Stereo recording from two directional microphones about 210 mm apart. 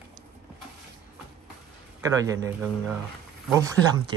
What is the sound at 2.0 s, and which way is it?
Speech, 15° right (ahead or behind).